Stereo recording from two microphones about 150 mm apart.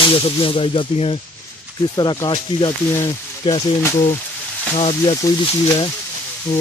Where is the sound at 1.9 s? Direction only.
25° left (ahead or behind).